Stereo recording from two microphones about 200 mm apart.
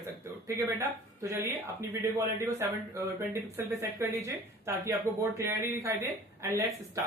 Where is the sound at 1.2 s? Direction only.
15° right (ahead or behind).